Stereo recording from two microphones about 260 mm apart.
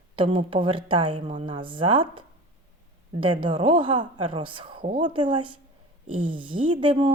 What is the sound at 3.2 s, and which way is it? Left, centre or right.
A woman's voice, centre.